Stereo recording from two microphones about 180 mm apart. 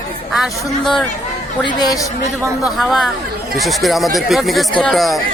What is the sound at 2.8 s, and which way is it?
Speech, centre (ahead or behind).